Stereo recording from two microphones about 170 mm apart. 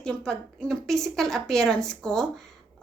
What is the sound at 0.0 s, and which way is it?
A woman's voice, 5° left (ahead or behind).